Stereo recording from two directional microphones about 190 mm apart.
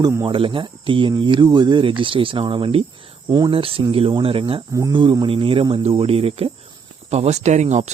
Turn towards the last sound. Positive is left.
turn(degrees=-35)  # may be behind; listen again after turning